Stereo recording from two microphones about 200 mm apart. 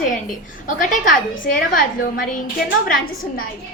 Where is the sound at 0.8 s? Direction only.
40° left (ahead or behind).